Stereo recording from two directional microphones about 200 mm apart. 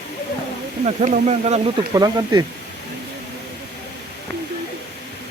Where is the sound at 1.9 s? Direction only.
20° right (ahead or behind).